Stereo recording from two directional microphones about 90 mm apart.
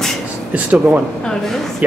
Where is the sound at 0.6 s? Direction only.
15° right (ahead or behind).